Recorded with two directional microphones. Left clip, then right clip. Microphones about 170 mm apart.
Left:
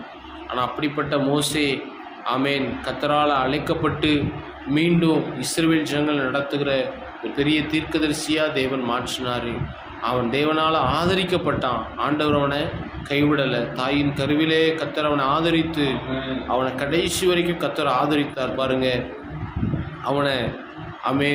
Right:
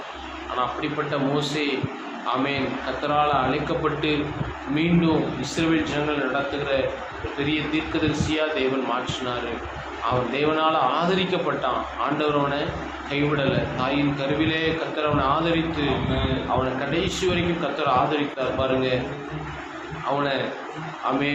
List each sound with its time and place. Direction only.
0.5 s a man's voice: 65° left (ahead or behind)
21.1 s a man's voice: 65° left (ahead or behind)